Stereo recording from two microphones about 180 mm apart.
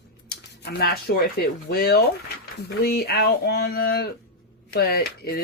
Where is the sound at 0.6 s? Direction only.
60° left (ahead or behind).